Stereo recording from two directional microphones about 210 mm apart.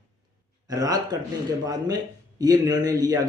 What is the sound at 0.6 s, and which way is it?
A man's voice, 20° right (ahead or behind).